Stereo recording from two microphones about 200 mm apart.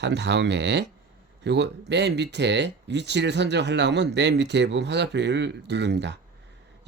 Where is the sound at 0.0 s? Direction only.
60° right (ahead or behind).